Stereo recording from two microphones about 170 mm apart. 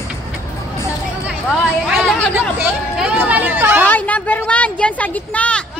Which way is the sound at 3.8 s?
10° left (ahead or behind).